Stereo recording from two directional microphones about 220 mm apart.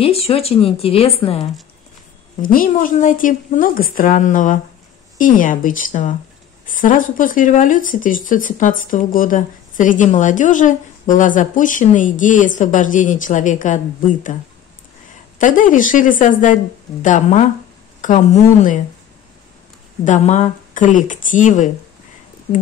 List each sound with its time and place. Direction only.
0.0 s a woman's voice: 25° left (ahead or behind)
2.4 s speech: 40° left (ahead or behind)
15.3 s speech: 35° left (ahead or behind)
20.1 s speech: 35° left (ahead or behind)